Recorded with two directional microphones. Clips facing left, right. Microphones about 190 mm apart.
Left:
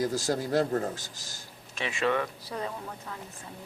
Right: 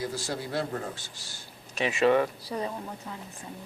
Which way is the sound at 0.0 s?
45° left (ahead or behind).